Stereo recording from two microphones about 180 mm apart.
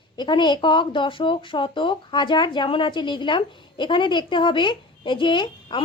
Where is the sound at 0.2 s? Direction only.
25° left (ahead or behind).